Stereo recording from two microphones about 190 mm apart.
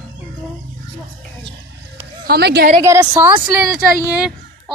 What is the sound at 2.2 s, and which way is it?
Speech, 55° right (ahead or behind).